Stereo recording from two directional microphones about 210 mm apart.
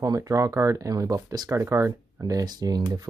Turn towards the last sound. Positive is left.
turn(degrees=-20)  # may be behind; listen again after turning